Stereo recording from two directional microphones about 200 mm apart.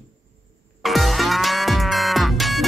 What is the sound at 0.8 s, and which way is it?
Music, centre (ahead or behind).